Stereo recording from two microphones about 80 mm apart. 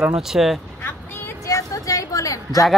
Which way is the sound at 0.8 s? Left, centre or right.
Left.